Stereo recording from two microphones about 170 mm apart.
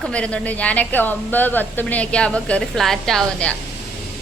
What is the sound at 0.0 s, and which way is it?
A woman's voice, 5° left (ahead or behind).